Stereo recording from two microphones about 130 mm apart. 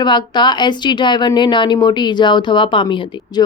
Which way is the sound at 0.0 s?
35° left (ahead or behind).